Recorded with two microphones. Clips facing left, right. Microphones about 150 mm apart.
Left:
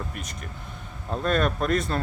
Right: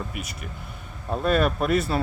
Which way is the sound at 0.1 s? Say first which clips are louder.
Right 2 dB; 10° right (ahead or behind).